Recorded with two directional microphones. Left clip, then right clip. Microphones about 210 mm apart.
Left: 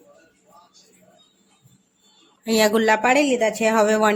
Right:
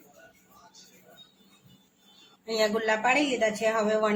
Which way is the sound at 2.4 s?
55° left (ahead or behind).